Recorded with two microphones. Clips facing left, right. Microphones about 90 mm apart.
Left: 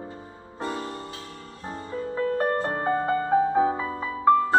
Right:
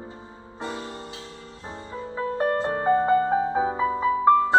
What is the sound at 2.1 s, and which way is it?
Music, 20° right (ahead or behind).